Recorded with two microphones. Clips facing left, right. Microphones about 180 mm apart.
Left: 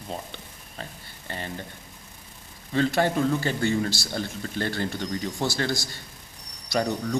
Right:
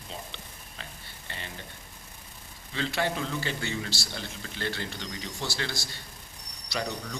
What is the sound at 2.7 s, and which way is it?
A man's voice, 45° left (ahead or behind).